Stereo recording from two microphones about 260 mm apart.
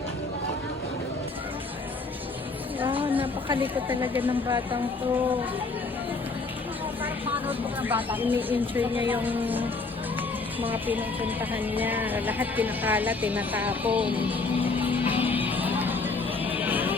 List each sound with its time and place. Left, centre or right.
2.8 s a sound: centre
3.5 s a woman's voice: centre
4.3 s a woman's voice: centre
7.0 s a woman's voice: centre
10.7 s speech: centre